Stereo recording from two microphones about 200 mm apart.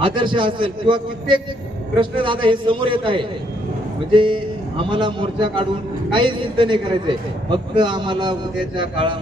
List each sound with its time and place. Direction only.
0.0 s a man's voice: 25° right (ahead or behind)